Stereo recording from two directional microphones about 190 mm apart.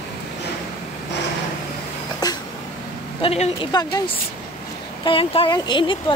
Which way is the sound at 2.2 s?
20° left (ahead or behind).